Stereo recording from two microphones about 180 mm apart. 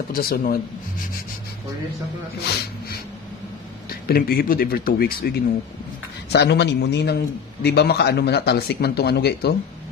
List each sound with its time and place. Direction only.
0.1 s speech: 55° left (ahead or behind)
4.1 s speech: 55° left (ahead or behind)
6.3 s a man's voice: 70° left (ahead or behind)